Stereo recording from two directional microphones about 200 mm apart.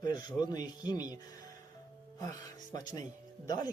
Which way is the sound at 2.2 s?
20° left (ahead or behind).